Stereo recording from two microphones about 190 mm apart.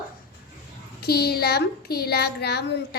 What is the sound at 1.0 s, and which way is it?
Speech, 55° left (ahead or behind).